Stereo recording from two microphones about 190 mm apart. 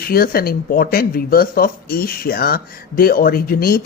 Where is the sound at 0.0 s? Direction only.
55° left (ahead or behind).